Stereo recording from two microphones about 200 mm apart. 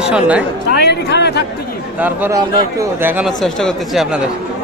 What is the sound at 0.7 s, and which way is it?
Speech, 55° left (ahead or behind).